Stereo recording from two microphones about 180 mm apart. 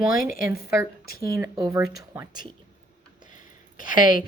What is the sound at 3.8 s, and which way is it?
Speech, 25° right (ahead or behind).